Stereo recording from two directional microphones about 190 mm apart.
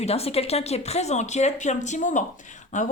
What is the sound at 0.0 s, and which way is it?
Speech, 30° left (ahead or behind).